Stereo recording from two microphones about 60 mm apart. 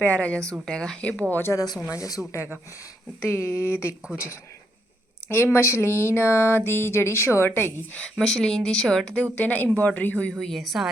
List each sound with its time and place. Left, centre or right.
0.0 s speech: left
1.5 s speech: left
1.9 s speech: left
3.2 s a woman's voice: left
5.3 s a woman's voice: left
6.1 s music: left
6.7 s a woman's voice: left
8.1 s speech: centre
9.3 s speech: left
10.4 s a woman's voice: centre